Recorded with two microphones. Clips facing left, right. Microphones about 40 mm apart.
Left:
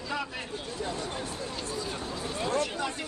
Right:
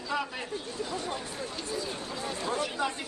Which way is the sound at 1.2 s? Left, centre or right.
Left.